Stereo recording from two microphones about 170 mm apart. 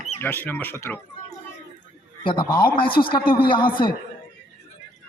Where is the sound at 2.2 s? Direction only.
30° left (ahead or behind).